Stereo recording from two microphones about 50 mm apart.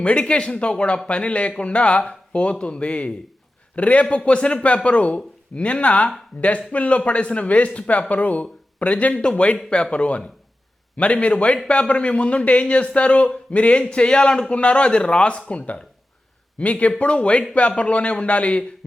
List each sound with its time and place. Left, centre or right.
0.0 s speech: left